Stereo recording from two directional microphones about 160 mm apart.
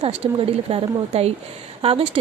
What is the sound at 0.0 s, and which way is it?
Speech, 35° right (ahead or behind).